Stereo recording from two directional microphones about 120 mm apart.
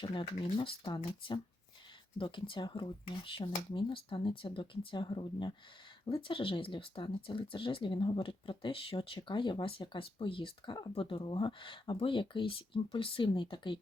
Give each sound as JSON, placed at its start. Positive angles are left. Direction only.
{"t": 0.0, "sound": "speech", "side_deg": 45}